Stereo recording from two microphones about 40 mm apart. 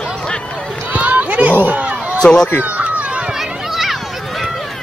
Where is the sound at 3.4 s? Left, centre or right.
Centre.